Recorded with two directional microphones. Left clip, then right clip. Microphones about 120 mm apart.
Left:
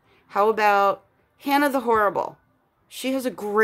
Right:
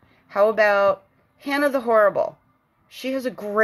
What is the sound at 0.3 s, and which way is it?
A woman's voice, 40° left (ahead or behind).